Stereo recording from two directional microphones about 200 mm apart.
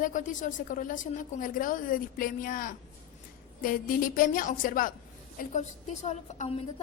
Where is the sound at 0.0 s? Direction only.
40° left (ahead or behind).